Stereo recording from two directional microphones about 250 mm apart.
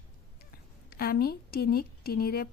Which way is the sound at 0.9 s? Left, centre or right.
Left.